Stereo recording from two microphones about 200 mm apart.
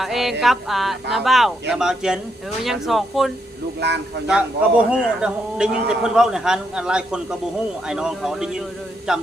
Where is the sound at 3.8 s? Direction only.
60° right (ahead or behind).